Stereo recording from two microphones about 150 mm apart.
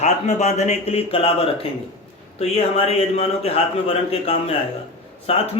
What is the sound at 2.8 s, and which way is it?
A man's voice, 45° left (ahead or behind).